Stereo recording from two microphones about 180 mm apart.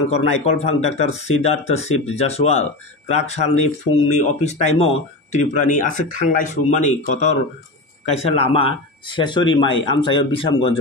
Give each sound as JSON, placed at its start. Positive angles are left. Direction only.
{"t": 0.1, "sound": "speech", "side_deg": 35}